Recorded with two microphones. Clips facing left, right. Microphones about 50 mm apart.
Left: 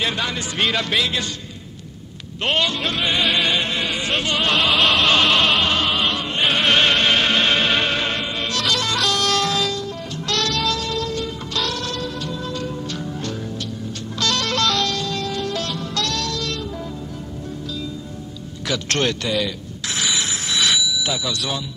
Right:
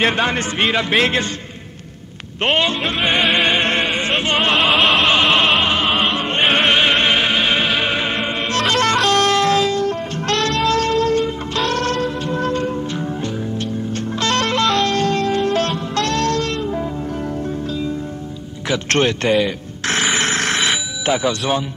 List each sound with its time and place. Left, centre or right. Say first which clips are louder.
0.0 s speech: right 6 dB; right
0.6 s a man's voice: right 1 dB; right
0.9 s music: right 5 dB; right
2.4 s music: right 3 dB; right
4.6 s opera: right 1 dB; right
6.7 s music: right 2 dB; centre
8.2 s music: right 5 dB; right
9.8 s music: right 7 dB; right
10.3 s music: right 5 dB; right
13.0 s music: right 4 dB; right
15.0 s music: right 8 dB; right
18.9 s a man's voice: right 6 dB; right
20.0 s a sound: right 6 dB; right
20.8 s speech: right 5 dB; right